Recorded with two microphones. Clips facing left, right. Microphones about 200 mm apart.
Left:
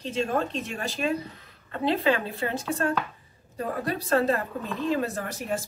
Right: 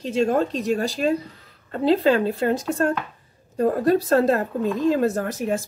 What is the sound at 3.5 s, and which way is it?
A woman's voice, 45° right (ahead or behind).